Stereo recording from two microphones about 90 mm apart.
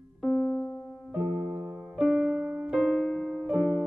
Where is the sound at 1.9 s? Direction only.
5° right (ahead or behind).